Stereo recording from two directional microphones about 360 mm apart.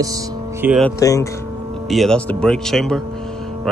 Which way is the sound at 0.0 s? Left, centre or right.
Centre.